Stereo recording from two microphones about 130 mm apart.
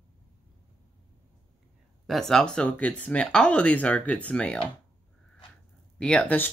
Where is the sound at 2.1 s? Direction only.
5° left (ahead or behind).